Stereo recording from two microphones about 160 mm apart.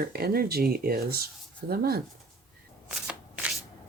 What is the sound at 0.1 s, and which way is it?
Speech, 75° right (ahead or behind).